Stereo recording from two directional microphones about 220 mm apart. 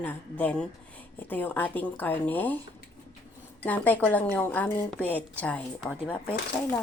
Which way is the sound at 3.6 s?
10° left (ahead or behind).